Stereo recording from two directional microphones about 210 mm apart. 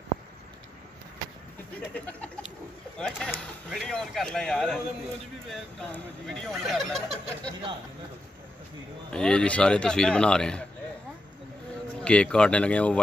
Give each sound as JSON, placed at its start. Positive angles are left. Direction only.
{"t": 2.0, "sound": "bird", "side_deg": 5}
{"t": 3.0, "sound": "speech", "side_deg": 5}
{"t": 9.1, "sound": "speech", "side_deg": 5}
{"t": 12.0, "sound": "speech", "side_deg": 5}